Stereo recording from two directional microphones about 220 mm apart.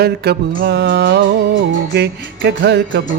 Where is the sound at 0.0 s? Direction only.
45° right (ahead or behind).